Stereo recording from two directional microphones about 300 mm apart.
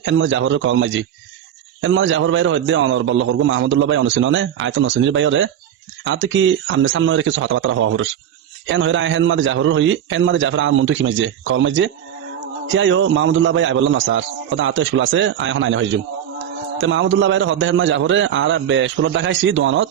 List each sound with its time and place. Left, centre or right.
0.0 s a man's voice: right